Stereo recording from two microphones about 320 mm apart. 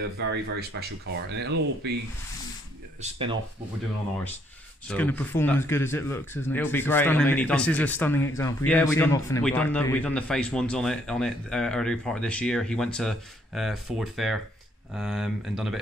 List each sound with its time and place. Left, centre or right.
0.3 s speech: right
3.0 s speech: centre
4.8 s a man's voice: centre